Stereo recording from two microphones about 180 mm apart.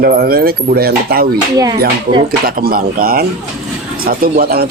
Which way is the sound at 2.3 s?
55° right (ahead or behind).